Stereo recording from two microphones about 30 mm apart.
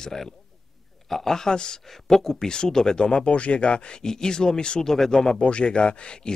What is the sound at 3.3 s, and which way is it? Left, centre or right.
Speech, left.